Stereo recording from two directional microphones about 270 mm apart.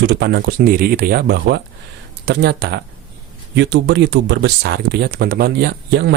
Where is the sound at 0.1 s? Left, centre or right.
Right.